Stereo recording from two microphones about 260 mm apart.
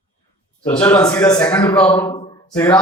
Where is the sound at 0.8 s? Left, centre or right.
Centre.